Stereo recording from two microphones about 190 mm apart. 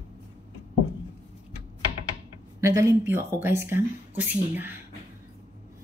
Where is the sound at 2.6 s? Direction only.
15° right (ahead or behind).